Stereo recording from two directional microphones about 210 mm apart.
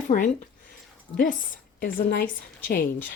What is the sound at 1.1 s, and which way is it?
A woman's voice, 40° left (ahead or behind).